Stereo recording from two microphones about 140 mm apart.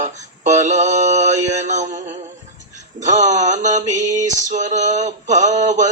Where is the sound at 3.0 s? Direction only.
60° right (ahead or behind).